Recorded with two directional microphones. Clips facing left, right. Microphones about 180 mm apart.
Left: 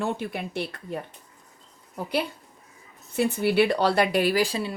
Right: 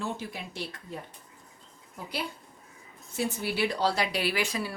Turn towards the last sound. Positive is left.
turn(degrees=25)  # may be behind; listen again after turning